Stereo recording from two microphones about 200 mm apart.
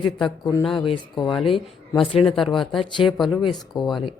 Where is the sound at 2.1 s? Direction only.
25° left (ahead or behind).